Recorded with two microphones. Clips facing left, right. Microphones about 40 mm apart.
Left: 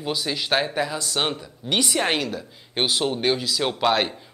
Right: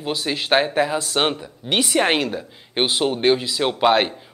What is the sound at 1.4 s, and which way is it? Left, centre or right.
Speech, centre.